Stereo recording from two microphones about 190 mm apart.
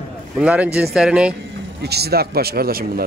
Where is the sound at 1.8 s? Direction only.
60° right (ahead or behind).